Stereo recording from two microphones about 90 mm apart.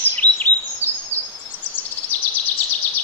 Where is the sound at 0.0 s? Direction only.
20° left (ahead or behind).